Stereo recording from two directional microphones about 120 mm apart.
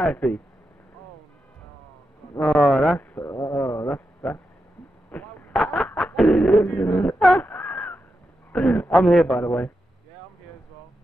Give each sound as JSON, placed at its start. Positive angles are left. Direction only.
{"t": 0.0, "sound": "a man's voice", "side_deg": 15}
{"t": 2.3, "sound": "speech", "side_deg": 5}
{"t": 3.0, "sound": "a sound", "side_deg": 20}
{"t": 8.5, "sound": "a man's voice", "side_deg": 10}
{"t": 9.4, "sound": "a man's voice", "side_deg": 15}